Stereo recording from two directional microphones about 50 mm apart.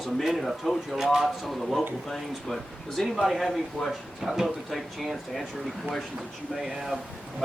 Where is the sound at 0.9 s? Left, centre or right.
Centre.